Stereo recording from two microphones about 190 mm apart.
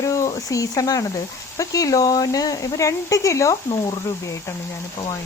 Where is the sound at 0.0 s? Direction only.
15° left (ahead or behind).